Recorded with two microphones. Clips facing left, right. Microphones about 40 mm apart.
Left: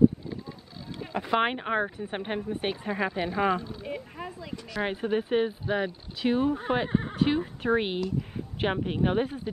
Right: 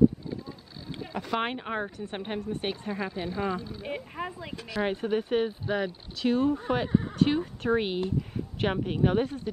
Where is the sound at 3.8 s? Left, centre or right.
Right.